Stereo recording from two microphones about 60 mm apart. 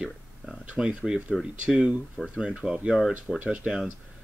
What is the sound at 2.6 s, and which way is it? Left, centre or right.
Speech, centre.